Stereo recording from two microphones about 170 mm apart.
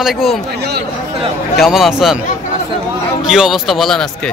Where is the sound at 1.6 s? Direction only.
Centre (ahead or behind).